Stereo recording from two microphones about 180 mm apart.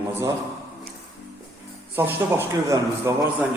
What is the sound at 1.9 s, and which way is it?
A man's voice, 10° right (ahead or behind).